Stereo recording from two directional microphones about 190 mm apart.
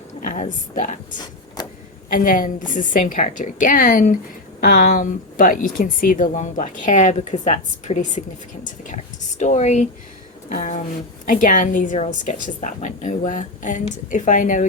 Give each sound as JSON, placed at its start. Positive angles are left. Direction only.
{"t": 0.2, "sound": "a woman's voice", "side_deg": 45}
{"t": 1.6, "sound": "a sound", "side_deg": 20}
{"t": 2.1, "sound": "a woman's voice", "side_deg": 45}
{"t": 9.4, "sound": "a woman's voice", "side_deg": 35}